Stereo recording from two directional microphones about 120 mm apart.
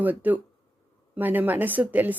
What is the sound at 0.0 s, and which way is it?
A woman's voice, 15° right (ahead or behind).